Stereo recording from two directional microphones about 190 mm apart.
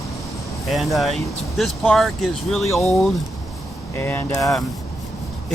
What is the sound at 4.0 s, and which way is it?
Speech, 10° left (ahead or behind).